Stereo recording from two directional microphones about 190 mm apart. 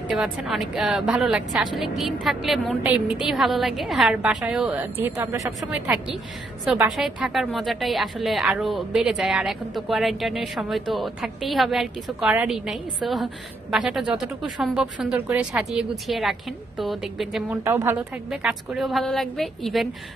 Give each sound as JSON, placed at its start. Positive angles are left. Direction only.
{"t": 0.1, "sound": "a woman's voice", "side_deg": 0}
{"t": 6.6, "sound": "a woman's voice", "side_deg": -5}
{"t": 17.6, "sound": "a woman's voice", "side_deg": -10}